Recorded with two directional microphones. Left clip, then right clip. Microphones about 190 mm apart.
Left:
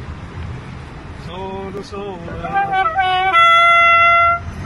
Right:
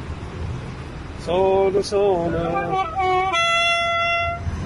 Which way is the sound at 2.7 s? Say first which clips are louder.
Left 5 dB; 15° right (ahead or behind).